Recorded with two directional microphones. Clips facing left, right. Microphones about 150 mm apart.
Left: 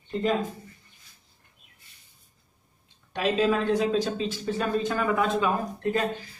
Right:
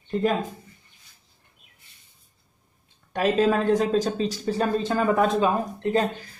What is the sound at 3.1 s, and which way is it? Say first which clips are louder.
Speech: right 3 dB; 45° right (ahead or behind).